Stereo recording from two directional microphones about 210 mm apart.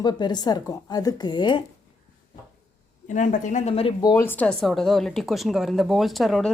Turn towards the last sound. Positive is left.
turn(degrees=0)  # may be behind; listen again after turning